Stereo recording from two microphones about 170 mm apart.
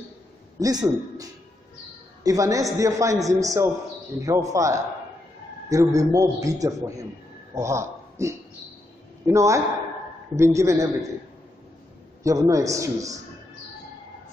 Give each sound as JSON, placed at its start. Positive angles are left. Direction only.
{"t": 0.6, "sound": "a man's voice", "side_deg": -20}
{"t": 12.2, "sound": "a man's voice", "side_deg": -20}